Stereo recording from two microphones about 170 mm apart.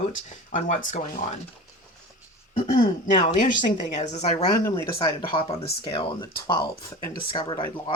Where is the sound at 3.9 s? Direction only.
45° left (ahead or behind).